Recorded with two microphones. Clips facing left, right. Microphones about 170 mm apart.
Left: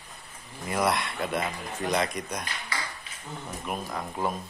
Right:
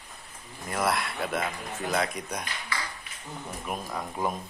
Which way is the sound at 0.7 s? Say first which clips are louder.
Left 1 dB; centre (ahead or behind).